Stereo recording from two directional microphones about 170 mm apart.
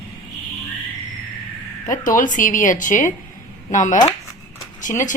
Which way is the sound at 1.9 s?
50° left (ahead or behind).